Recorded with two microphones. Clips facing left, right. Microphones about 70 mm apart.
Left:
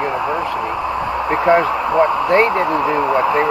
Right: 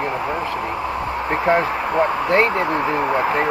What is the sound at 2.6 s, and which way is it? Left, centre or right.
Speech, left.